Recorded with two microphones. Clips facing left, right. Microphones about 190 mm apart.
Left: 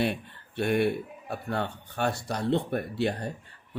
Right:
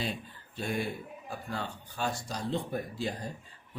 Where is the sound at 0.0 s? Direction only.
65° left (ahead or behind).